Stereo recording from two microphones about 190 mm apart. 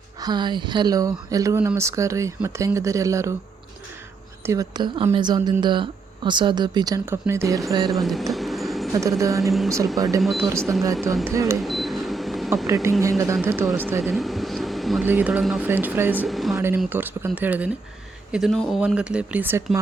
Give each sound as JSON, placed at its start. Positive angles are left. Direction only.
{"t": 0.2, "sound": "speech", "side_deg": -20}
{"t": 4.4, "sound": "speech", "side_deg": -20}
{"t": 7.9, "sound": "a sound", "side_deg": 0}
{"t": 8.9, "sound": "speech", "side_deg": -15}
{"t": 9.4, "sound": "speech", "side_deg": 0}
{"t": 9.6, "sound": "speech", "side_deg": -15}
{"t": 10.6, "sound": "speech", "side_deg": 0}
{"t": 11.3, "sound": "speech", "side_deg": -15}
{"t": 11.6, "sound": "camera", "side_deg": 0}
{"t": 12.6, "sound": "speech", "side_deg": -15}
{"t": 14.0, "sound": "air conditioning", "side_deg": 0}
{"t": 15.1, "sound": "speech", "side_deg": -5}
{"t": 16.6, "sound": "speech", "side_deg": -10}